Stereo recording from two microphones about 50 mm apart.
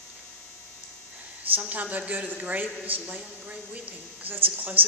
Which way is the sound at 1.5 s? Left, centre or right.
Right.